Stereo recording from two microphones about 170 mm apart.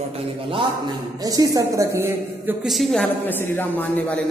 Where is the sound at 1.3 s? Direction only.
20° right (ahead or behind).